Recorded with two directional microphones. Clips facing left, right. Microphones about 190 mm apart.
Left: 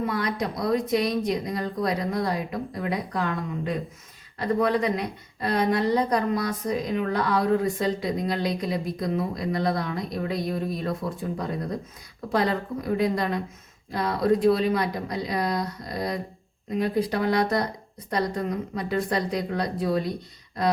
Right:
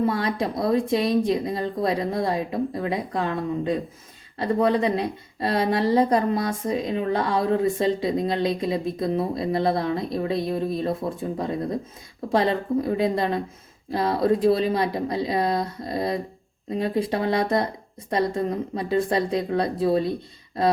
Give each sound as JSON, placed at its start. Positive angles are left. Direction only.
{"t": 0.0, "sound": "a woman's voice", "side_deg": -30}